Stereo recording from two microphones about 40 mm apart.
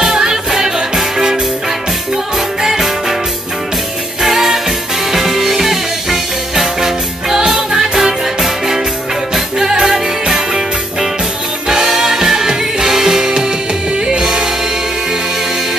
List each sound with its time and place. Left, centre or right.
0.0 s music: centre
4.2 s music: centre